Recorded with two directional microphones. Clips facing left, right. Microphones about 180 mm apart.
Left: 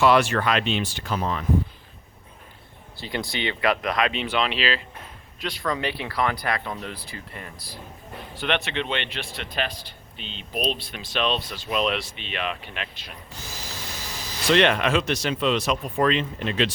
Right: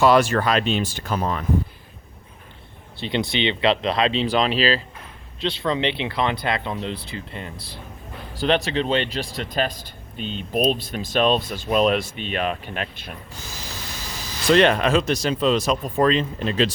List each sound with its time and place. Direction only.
0.0 s speech: 40° right (ahead or behind)
3.0 s speech: 20° right (ahead or behind); by 4.8 s 35° right (ahead or behind)
5.4 s speech: 25° right (ahead or behind)
8.4 s a man's voice: 35° right (ahead or behind)
14.4 s speech: 40° right (ahead or behind)